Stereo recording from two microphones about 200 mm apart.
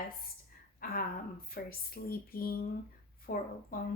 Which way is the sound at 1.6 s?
50° left (ahead or behind).